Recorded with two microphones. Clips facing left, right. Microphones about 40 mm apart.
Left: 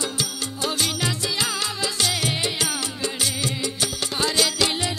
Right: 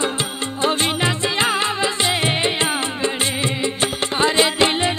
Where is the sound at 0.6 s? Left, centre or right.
Right.